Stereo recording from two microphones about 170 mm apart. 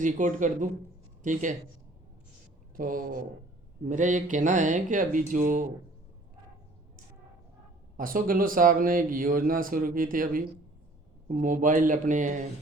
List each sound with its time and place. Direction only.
0.0 s speech: 50° right (ahead or behind)
2.7 s speech: 55° right (ahead or behind)
7.9 s speech: 55° right (ahead or behind)